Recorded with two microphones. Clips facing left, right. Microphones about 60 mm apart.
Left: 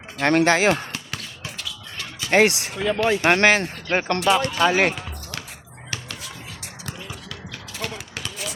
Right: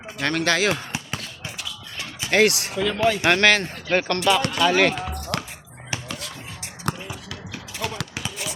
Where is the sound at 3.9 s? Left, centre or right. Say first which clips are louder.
Even; centre.